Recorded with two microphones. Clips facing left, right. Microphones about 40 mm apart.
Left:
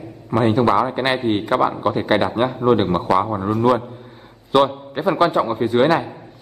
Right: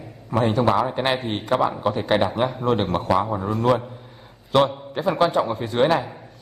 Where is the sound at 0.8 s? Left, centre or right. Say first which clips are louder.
Left 4 dB; centre.